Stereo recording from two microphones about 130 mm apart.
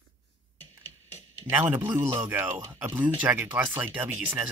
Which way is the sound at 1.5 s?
15° right (ahead or behind).